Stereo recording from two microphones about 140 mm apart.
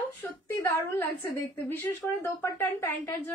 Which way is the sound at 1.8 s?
15° left (ahead or behind).